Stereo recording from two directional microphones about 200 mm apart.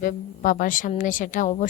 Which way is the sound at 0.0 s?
40° left (ahead or behind).